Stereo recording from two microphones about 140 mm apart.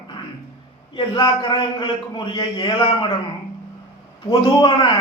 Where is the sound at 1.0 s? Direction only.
35° left (ahead or behind).